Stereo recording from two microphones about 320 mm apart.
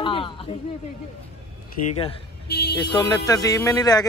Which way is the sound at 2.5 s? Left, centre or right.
Left.